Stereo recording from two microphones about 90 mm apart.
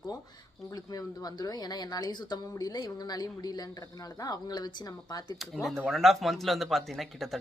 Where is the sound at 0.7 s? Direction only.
45° left (ahead or behind).